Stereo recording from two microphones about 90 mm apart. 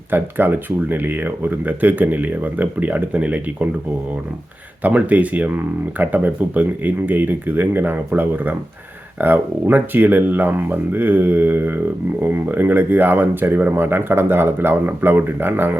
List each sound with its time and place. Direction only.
0.1 s speech: 20° right (ahead or behind)
4.8 s speech: 15° right (ahead or behind)